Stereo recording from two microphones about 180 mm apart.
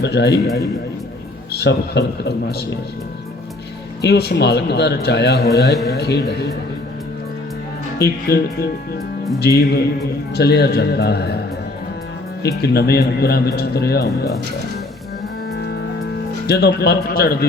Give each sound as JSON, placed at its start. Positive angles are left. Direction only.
{"t": 0.0, "sound": "a man's voice", "side_deg": 70}
{"t": 1.6, "sound": "a man's voice", "side_deg": 65}
{"t": 4.0, "sound": "a man's voice", "side_deg": 65}
{"t": 7.9, "sound": "a man's voice", "side_deg": 65}
{"t": 12.4, "sound": "a man's voice", "side_deg": 65}
{"t": 15.5, "sound": "music", "side_deg": 60}
{"t": 16.5, "sound": "a man's voice", "side_deg": 65}